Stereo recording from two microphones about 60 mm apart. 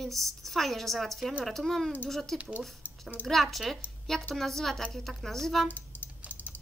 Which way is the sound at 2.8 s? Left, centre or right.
Left.